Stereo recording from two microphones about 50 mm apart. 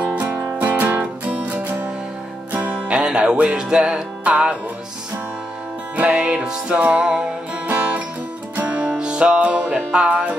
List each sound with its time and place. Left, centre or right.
0.2 s music: right
0.6 s music: right
2.9 s music: centre
5.9 s music: right
6.4 s music: centre
7.6 s music: right